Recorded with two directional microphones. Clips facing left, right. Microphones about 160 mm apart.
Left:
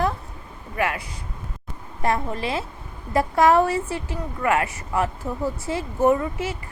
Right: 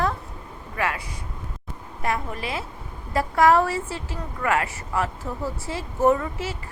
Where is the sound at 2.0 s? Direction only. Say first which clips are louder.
Left 3 dB; 30° left (ahead or behind).